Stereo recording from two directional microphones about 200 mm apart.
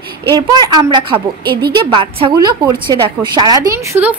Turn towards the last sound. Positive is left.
turn(degrees=-10)  # may be behind; listen again after turning